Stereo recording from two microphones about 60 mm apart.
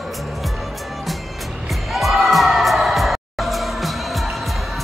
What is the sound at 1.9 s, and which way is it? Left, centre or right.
Music, centre.